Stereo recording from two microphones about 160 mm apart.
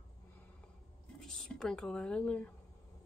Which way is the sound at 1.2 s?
5° left (ahead or behind).